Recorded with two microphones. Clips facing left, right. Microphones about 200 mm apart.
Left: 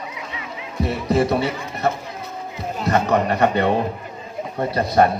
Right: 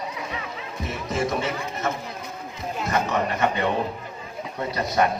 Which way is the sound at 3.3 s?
35° left (ahead or behind).